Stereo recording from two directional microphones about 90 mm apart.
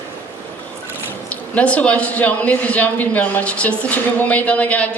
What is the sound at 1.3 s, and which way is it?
Speech, 15° left (ahead or behind).